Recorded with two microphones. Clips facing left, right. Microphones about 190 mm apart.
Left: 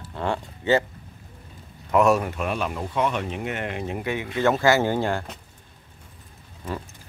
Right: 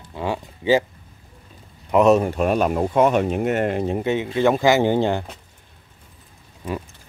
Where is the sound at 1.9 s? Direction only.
20° right (ahead or behind); by 4.0 s 40° right (ahead or behind).